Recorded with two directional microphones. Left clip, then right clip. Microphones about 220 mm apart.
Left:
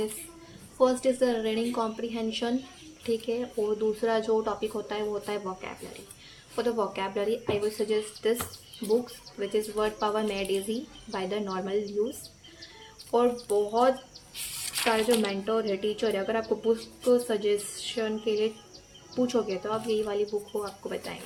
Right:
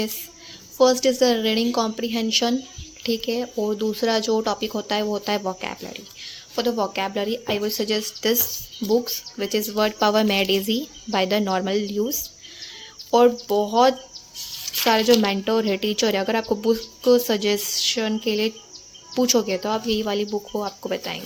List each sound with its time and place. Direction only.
0.8 s speech: 40° right (ahead or behind)
9.4 s speech: 45° right (ahead or behind)
13.1 s speech: 45° right (ahead or behind)
14.9 s speech: 45° right (ahead or behind)